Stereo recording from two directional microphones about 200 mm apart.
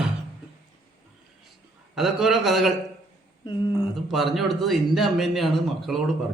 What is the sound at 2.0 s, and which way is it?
Speech, centre (ahead or behind).